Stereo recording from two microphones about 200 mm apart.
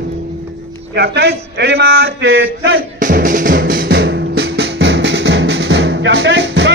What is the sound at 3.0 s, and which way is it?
Music, 40° right (ahead or behind).